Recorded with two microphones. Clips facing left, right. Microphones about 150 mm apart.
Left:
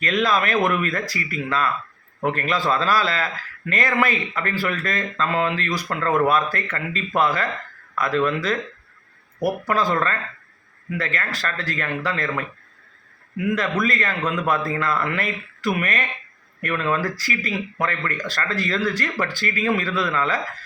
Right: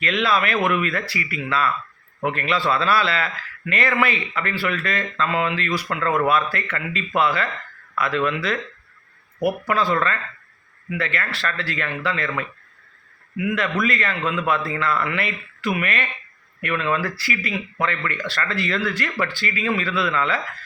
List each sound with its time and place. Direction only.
0.0 s a man's voice: 40° left (ahead or behind)
9.6 s a man's voice: 40° left (ahead or behind)
13.3 s a man's voice: 40° left (ahead or behind)